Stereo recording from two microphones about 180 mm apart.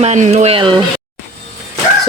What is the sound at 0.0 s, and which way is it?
Speech, 40° right (ahead or behind).